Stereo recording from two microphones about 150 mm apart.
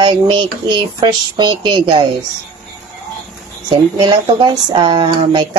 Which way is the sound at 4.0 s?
30° right (ahead or behind).